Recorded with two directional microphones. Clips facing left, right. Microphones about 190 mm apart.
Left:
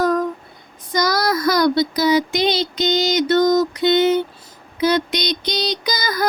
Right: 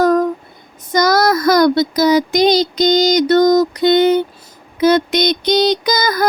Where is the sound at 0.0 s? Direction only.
40° right (ahead or behind).